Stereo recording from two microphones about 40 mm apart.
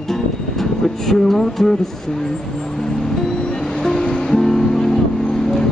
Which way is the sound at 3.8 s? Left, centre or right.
Centre.